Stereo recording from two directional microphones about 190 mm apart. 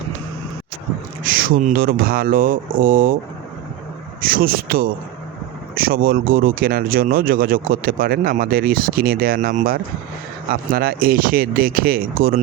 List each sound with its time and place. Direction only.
1.2 s speech: 50° right (ahead or behind)
4.2 s speech: 50° right (ahead or behind)